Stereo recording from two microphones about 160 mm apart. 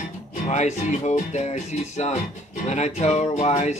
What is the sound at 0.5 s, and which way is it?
Speech, 50° left (ahead or behind).